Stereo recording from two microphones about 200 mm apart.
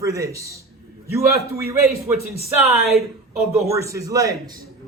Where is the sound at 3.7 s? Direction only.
15° right (ahead or behind).